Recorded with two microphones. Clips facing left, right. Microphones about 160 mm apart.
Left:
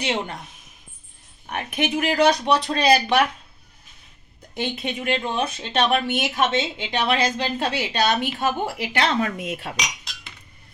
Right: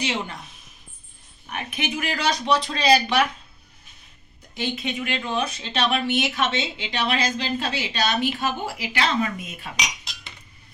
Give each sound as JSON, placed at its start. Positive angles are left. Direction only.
{"t": 0.0, "sound": "speech", "side_deg": 55}
{"t": 1.5, "sound": "speech", "side_deg": 55}
{"t": 4.6, "sound": "speech", "side_deg": 50}